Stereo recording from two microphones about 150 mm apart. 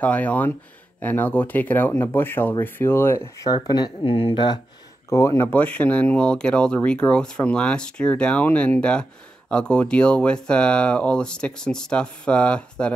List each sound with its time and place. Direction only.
0.0 s speech: 10° left (ahead or behind); by 4.6 s 30° left (ahead or behind)
5.1 s speech: 20° left (ahead or behind)